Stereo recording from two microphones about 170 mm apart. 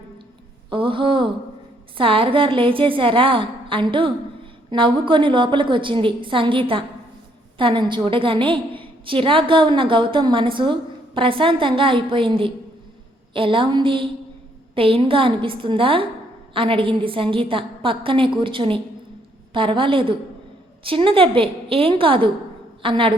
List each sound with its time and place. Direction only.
0.7 s a woman's voice: 30° right (ahead or behind)